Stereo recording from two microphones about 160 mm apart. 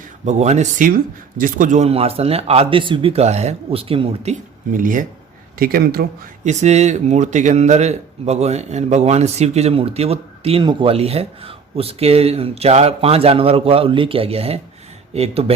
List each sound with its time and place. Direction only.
0.3 s speech: 45° right (ahead or behind); by 6.1 s 75° right (ahead or behind)
6.4 s speech: 45° right (ahead or behind)